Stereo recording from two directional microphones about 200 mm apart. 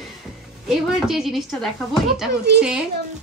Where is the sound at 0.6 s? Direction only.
Centre (ahead or behind).